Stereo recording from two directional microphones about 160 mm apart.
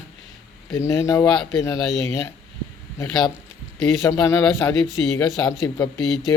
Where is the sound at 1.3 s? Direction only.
5° left (ahead or behind).